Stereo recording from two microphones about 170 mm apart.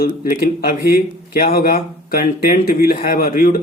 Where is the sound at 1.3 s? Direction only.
60° left (ahead or behind).